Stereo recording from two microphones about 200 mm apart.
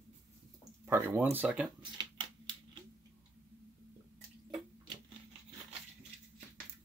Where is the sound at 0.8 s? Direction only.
10° right (ahead or behind).